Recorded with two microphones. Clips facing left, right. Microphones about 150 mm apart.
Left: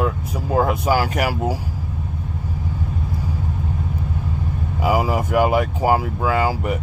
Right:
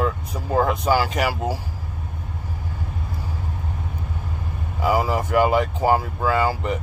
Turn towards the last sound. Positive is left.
turn(degrees=10)  # may be behind; listen again after turning